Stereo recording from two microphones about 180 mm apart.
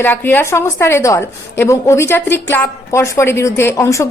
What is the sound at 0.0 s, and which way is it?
A woman's voice, 10° left (ahead or behind).